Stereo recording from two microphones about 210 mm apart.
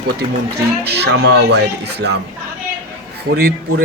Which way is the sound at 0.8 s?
50° right (ahead or behind).